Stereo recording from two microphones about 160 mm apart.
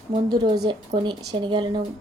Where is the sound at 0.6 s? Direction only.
30° right (ahead or behind).